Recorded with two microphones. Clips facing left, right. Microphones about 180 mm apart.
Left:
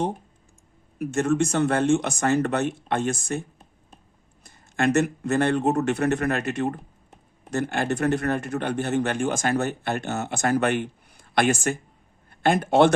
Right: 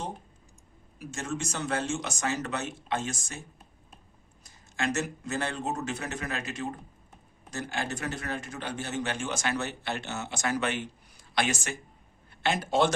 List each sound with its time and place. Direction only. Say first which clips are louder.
0.9 s speech: left 13 dB; 60° left (ahead or behind)
4.4 s speech: left 8 dB; 60° left (ahead or behind)